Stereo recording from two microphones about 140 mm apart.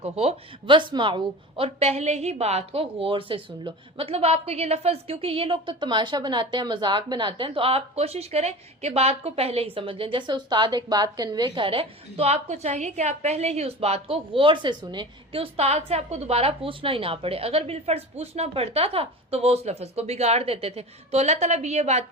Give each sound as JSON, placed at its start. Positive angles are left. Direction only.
{"t": 0.0, "sound": "a woman's voice", "side_deg": -45}